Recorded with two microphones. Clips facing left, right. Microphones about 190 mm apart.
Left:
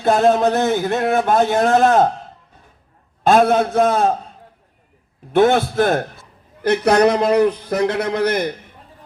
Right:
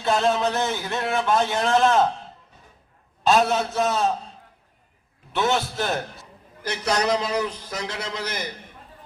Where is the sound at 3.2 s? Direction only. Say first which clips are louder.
Left 6 dB; 55° left (ahead or behind).